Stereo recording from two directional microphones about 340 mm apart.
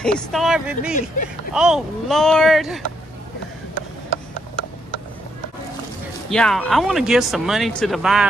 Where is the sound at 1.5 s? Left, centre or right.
Centre.